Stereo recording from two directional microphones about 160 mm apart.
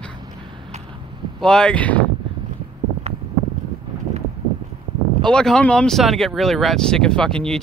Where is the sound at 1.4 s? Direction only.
5° left (ahead or behind).